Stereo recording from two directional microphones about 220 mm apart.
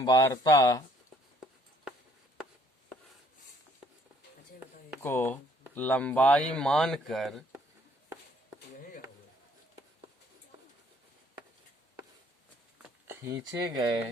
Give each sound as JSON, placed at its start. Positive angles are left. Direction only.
{"t": 0.0, "sound": "speech", "side_deg": 15}
{"t": 5.0, "sound": "speech", "side_deg": 10}
{"t": 12.8, "sound": "a sound", "side_deg": -10}